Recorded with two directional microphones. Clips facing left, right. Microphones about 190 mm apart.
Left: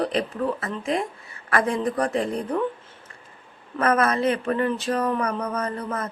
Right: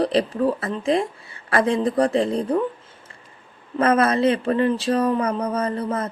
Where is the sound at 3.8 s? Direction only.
30° right (ahead or behind).